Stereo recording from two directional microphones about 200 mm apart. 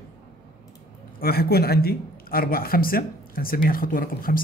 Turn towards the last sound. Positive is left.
turn(degrees=45)  # may be behind; listen again after turning